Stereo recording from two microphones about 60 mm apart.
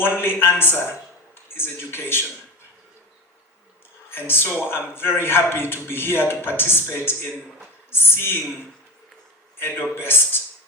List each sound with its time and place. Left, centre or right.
0.0 s a man's voice: left
4.1 s a man's voice: left
9.6 s a man's voice: left